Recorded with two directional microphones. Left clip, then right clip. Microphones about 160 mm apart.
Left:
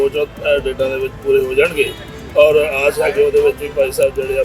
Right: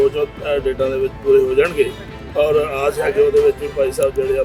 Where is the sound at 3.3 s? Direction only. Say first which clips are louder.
Left 1 dB; centre (ahead or behind).